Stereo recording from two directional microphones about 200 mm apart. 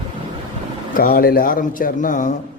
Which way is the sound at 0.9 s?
45° left (ahead or behind).